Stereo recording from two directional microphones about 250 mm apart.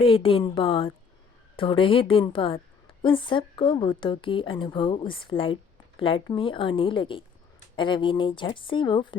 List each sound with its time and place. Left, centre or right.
0.0 s speech: left